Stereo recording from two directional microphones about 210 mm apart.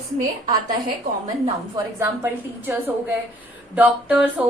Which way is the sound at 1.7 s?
15° right (ahead or behind).